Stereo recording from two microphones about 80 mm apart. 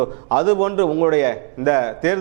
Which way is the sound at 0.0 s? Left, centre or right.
Right.